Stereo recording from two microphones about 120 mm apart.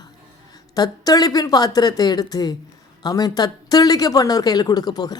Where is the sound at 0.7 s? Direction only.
35° left (ahead or behind).